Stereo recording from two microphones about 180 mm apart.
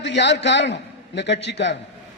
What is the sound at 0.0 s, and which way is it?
A man's voice, 75° left (ahead or behind).